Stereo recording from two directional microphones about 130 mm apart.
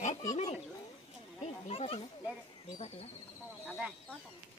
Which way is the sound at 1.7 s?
50° left (ahead or behind).